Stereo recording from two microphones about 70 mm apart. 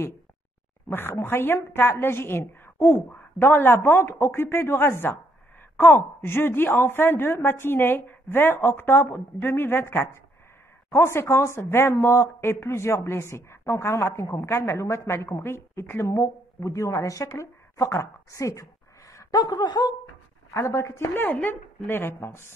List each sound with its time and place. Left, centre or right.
0.8 s a woman's voice: left
19.3 s speech: left
20.5 s a woman's voice: left
21.1 s speech: left